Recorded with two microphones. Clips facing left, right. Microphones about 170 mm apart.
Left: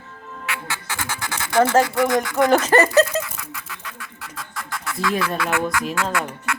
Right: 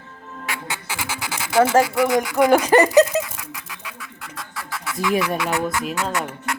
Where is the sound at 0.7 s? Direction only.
10° right (ahead or behind).